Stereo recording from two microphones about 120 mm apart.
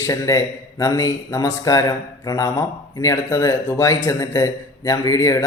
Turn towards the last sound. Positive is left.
turn(degrees=30)  # may be behind; listen again after turning